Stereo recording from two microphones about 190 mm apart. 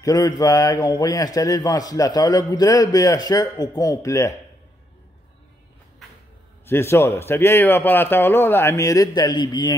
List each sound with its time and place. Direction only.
0.0 s a man's voice: 20° left (ahead or behind)
6.6 s a man's voice: 15° left (ahead or behind)